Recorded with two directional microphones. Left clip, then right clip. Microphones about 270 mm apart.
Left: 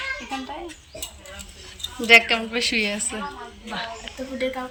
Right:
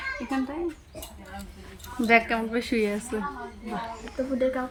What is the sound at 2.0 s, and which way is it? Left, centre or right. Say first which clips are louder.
A woman's voice: left 7 dB; centre.